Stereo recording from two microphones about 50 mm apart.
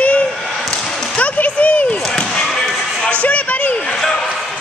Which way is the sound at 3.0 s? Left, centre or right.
Left.